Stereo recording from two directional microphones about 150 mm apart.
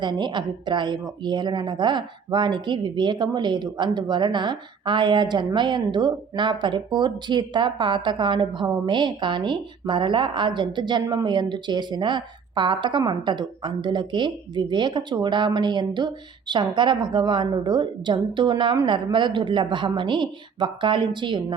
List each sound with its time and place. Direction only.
0.0 s speech: 30° right (ahead or behind)